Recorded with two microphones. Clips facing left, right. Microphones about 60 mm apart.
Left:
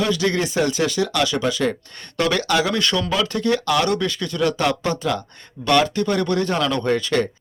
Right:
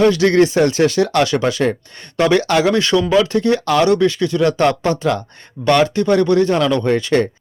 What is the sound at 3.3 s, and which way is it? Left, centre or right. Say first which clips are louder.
Speech: right 4 dB; right.